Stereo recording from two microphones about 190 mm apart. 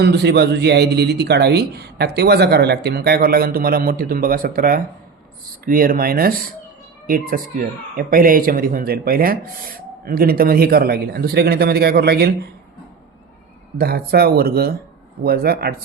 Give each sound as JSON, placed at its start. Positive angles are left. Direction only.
{"t": 0.0, "sound": "speech", "side_deg": -65}
{"t": 13.7, "sound": "speech", "side_deg": -55}